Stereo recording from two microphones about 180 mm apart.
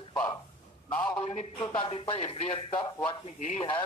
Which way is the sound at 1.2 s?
35° left (ahead or behind).